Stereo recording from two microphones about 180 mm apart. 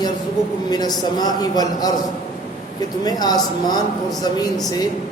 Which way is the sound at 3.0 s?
20° left (ahead or behind).